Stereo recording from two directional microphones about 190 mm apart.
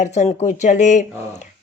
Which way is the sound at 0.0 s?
35° left (ahead or behind).